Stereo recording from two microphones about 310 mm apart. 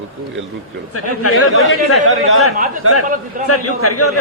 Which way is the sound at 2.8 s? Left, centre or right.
Right.